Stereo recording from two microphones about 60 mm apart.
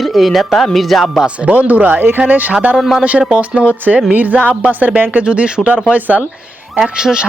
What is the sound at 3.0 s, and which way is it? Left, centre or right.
Speech, right.